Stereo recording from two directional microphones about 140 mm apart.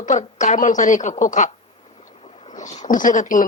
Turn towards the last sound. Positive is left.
turn(degrees=65)  # may be behind; listen again after turning